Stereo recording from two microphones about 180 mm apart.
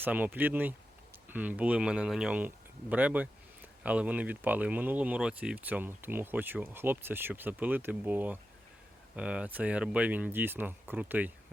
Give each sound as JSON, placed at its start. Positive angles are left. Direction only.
{"t": 0.0, "sound": "speech", "side_deg": -10}